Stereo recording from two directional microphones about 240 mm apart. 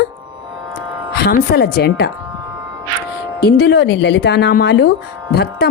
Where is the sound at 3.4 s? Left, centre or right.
Left.